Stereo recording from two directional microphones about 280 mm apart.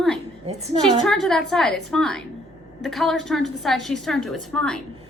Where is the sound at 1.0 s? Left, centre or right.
Centre.